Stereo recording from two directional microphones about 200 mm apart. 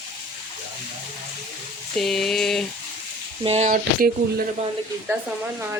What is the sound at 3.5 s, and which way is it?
Speech, 35° right (ahead or behind).